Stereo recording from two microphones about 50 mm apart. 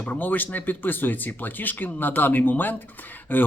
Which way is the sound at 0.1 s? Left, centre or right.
Left.